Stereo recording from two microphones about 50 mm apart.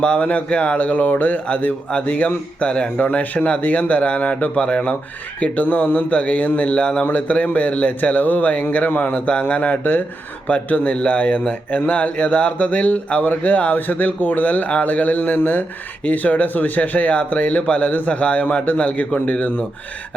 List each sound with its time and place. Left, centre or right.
0.0 s a man's voice: centre
0.3 s speech: left
1.5 s a man's voice: left
7.0 s speech: left